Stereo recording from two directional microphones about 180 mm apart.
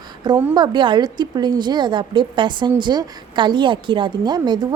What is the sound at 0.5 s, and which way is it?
A woman's voice, 25° right (ahead or behind).